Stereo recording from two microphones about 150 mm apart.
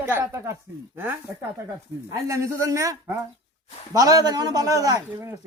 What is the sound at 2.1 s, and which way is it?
A man's voice, 20° right (ahead or behind).